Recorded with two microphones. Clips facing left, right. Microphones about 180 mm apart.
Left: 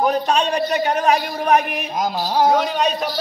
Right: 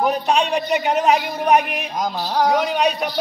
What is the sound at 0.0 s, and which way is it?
A man's voice, 15° right (ahead or behind).